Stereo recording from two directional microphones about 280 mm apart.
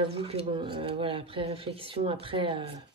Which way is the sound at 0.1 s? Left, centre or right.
Right.